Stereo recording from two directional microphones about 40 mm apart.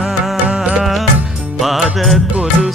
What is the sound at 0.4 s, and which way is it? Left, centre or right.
Music, right.